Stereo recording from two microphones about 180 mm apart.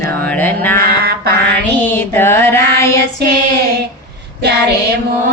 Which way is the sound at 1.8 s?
10° left (ahead or behind).